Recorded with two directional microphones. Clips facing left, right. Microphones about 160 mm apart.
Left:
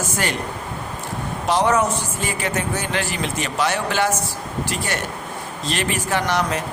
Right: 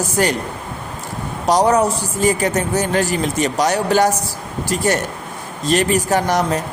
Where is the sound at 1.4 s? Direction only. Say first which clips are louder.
Right 4 dB; 40° right (ahead or behind).